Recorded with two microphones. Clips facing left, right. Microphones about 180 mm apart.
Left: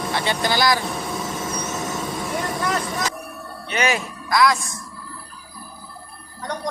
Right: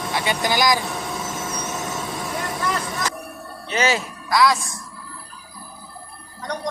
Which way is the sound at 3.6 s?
30° right (ahead or behind).